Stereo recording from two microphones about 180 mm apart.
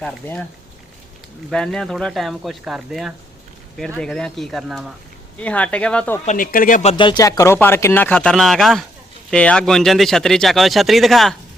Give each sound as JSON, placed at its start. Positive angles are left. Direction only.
{"t": 0.0, "sound": "speech", "side_deg": 5}
{"t": 1.5, "sound": "speech", "side_deg": 5}
{"t": 6.2, "sound": "speech", "side_deg": 50}
{"t": 6.9, "sound": "speech", "side_deg": 25}